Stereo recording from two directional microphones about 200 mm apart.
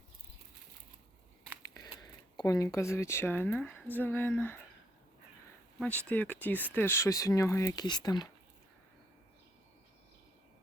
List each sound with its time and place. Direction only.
1.7 s speech: 20° left (ahead or behind)
5.8 s speech: 5° left (ahead or behind)